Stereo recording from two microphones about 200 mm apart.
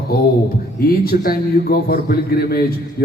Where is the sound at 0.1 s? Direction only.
50° left (ahead or behind).